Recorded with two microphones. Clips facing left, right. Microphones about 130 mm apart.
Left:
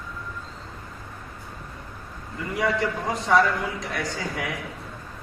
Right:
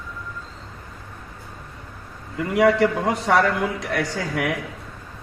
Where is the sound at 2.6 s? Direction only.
75° right (ahead or behind).